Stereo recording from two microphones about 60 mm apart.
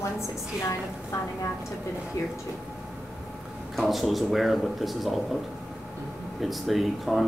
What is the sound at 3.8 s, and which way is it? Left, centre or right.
Speech, centre.